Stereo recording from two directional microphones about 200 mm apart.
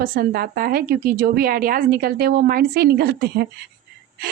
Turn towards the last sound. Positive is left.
turn(degrees=-50)  # may be behind; listen again after turning